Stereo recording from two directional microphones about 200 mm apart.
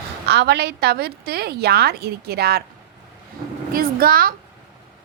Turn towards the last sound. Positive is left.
turn(degrees=-45)  # may be behind; listen again after turning